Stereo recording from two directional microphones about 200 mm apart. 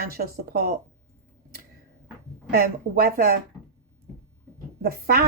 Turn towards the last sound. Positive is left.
turn(degrees=-50)  # may be behind; listen again after turning